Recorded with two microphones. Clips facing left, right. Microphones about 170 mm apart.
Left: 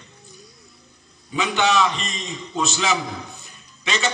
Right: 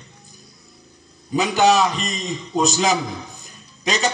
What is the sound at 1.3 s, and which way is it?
A man's voice, 40° right (ahead or behind).